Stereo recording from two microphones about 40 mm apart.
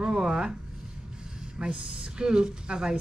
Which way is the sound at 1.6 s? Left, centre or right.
Right.